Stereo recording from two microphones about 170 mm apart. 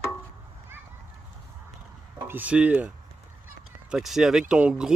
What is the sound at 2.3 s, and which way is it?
Speech, 10° right (ahead or behind).